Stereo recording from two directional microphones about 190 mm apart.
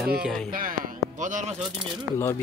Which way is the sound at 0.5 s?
45° right (ahead or behind).